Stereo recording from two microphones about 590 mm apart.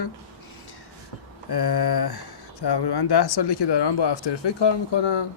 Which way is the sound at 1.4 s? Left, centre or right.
Left.